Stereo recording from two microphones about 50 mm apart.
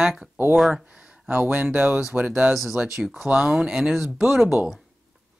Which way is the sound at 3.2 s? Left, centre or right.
Centre.